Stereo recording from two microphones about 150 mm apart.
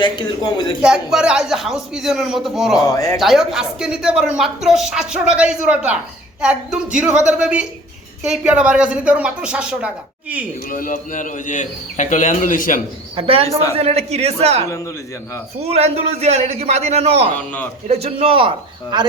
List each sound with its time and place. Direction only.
0.0 s a man's voice: 30° left (ahead or behind)
0.8 s speech: 5° right (ahead or behind)
2.8 s a man's voice: 25° left (ahead or behind)
3.2 s speech: centre (ahead or behind)
10.7 s a man's voice: 65° left (ahead or behind)
13.1 s a man's voice: 40° right (ahead or behind)